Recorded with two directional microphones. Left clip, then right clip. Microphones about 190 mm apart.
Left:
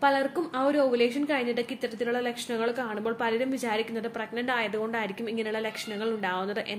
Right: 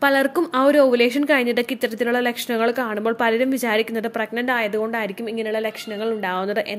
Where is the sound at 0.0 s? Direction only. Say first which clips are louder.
Right 7 dB; 50° right (ahead or behind).